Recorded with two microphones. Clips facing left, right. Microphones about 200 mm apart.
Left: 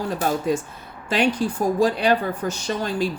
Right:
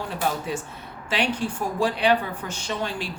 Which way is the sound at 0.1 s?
40° left (ahead or behind).